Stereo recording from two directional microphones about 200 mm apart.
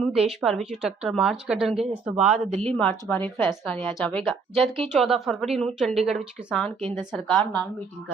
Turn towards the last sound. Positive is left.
turn(degrees=5)  # may be behind; listen again after turning